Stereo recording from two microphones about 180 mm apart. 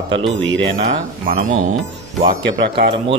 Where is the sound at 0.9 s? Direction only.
50° right (ahead or behind).